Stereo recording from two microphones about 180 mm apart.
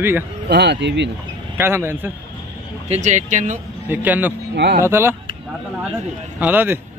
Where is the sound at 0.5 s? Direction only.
70° right (ahead or behind).